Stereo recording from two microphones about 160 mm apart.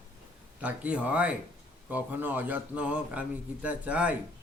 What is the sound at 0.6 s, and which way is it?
Speech, 10° right (ahead or behind).